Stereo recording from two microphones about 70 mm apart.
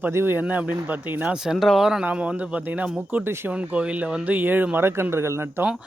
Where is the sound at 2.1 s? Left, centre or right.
Centre; by 5.5 s right.